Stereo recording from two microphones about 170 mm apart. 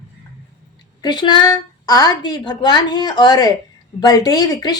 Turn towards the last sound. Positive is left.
turn(degrees=25)  # may be behind; listen again after turning